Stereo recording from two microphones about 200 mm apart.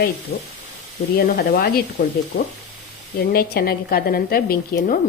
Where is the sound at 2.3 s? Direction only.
55° left (ahead or behind).